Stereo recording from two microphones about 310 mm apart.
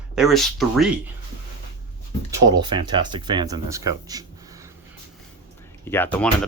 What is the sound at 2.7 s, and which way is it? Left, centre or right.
Speech, centre.